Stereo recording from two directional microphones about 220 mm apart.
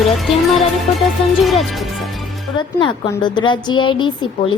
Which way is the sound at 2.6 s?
20° left (ahead or behind).